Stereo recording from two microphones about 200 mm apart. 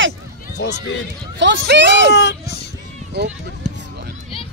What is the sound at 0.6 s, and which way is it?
Speech, 60° left (ahead or behind).